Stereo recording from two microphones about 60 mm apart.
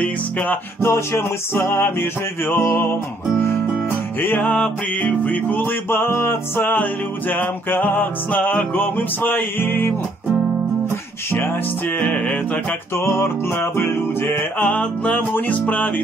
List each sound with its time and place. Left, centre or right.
0.0 s music: left
0.7 s music: left
4.2 s music: left
5.9 s music: left
12.0 s music: centre
12.9 s music: left